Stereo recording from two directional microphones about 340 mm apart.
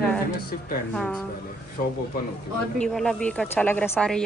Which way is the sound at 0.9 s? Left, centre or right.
Centre.